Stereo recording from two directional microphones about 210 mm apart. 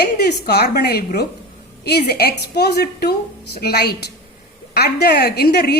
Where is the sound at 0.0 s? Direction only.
50° left (ahead or behind).